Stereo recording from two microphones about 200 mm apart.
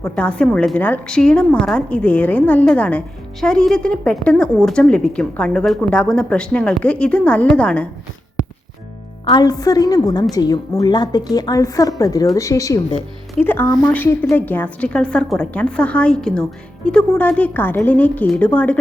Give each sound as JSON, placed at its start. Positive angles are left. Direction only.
{"t": 0.2, "sound": "a woman's voice", "side_deg": 5}
{"t": 9.3, "sound": "a woman's voice", "side_deg": 20}